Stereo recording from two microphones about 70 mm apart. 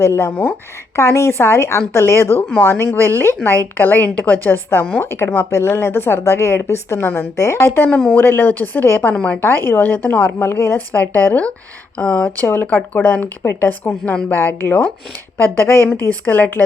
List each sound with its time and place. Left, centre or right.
0.0 s speech: left
7.9 s a woman's voice: centre
8.1 s speech: left
9.1 s a woman's voice: centre
9.4 s speech: left
15.9 s speech: left